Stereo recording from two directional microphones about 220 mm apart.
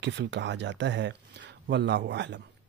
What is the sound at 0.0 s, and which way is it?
A man's voice, 55° right (ahead or behind).